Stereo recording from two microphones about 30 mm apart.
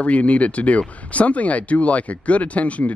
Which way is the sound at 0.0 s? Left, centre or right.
Left.